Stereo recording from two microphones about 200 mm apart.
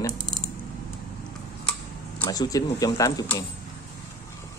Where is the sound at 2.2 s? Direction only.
20° left (ahead or behind).